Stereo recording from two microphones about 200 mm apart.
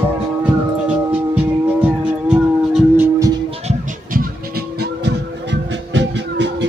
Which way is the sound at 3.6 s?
45° right (ahead or behind).